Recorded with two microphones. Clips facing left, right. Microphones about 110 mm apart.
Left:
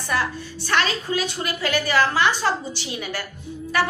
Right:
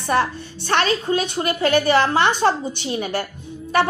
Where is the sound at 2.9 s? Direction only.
40° right (ahead or behind).